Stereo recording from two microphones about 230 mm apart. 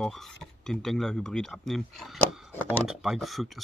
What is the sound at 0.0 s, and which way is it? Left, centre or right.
Speech, centre.